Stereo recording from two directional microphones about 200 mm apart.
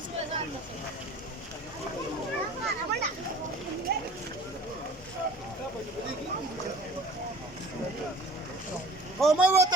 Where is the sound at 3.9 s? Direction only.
55° right (ahead or behind).